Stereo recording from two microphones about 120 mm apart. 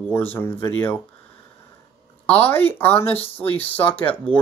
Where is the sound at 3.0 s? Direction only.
55° left (ahead or behind).